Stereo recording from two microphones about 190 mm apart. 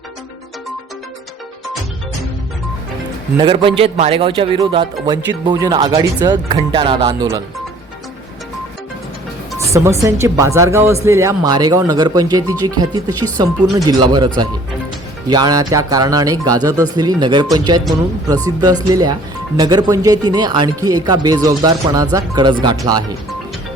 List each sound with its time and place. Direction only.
3.3 s speech: 25° right (ahead or behind)
9.7 s speech: 15° right (ahead or behind)
15.3 s speech: 20° right (ahead or behind)